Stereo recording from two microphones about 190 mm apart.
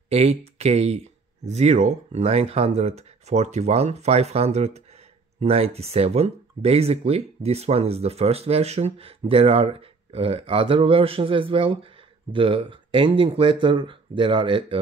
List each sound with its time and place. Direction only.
0.1 s speech: 30° right (ahead or behind)